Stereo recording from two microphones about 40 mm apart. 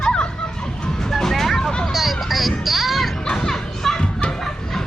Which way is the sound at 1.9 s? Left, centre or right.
Centre.